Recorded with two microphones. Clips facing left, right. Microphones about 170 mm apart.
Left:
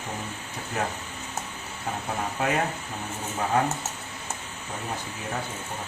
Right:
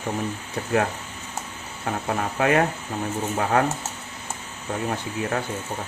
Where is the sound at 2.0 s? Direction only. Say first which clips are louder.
Right 6 dB; 65° right (ahead or behind).